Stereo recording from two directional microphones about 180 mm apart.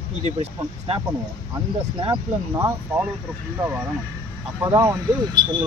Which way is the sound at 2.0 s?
20° right (ahead or behind).